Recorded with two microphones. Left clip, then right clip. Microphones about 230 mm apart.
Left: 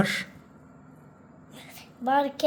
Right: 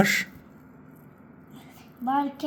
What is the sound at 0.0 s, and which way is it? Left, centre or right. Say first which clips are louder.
Speech: right 5 dB; centre.